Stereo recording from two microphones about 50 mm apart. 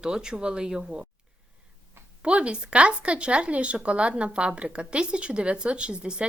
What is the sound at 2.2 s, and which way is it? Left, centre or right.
Speech, right.